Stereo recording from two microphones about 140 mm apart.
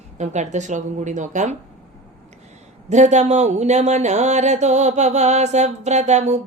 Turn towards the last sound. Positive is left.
turn(degrees=-55)  # may be behind; listen again after turning